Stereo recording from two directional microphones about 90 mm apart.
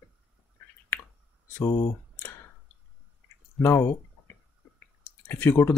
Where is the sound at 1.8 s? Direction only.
20° left (ahead or behind).